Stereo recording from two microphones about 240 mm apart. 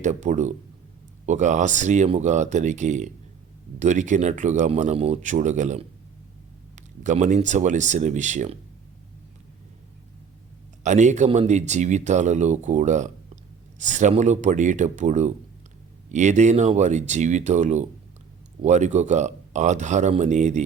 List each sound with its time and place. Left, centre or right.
0.0 s speech: right
10.8 s speech: right